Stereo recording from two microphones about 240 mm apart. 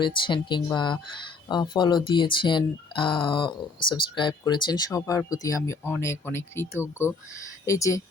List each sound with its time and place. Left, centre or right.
0.0 s speech: centre